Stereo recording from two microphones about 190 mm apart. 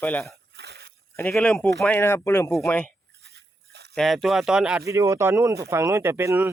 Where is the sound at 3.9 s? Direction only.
Centre (ahead or behind).